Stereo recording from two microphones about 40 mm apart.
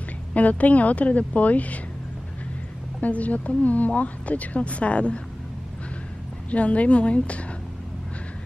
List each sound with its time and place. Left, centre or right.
0.3 s a woman's voice: left
3.0 s a woman's voice: left
6.5 s a woman's voice: left